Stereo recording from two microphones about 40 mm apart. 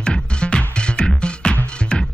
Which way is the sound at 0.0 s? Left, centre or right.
Left.